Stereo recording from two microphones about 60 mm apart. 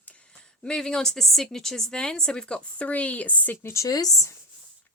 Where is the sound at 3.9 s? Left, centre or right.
Left.